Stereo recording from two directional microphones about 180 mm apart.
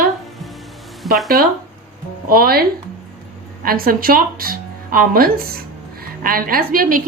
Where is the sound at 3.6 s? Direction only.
55° right (ahead or behind).